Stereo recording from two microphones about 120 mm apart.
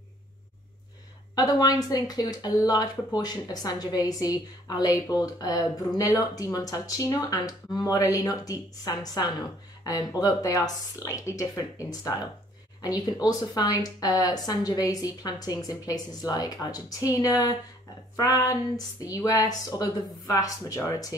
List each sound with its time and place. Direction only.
1.3 s speech: 35° left (ahead or behind)